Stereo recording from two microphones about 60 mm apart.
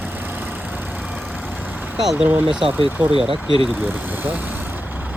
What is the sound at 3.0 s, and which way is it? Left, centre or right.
Speech, right.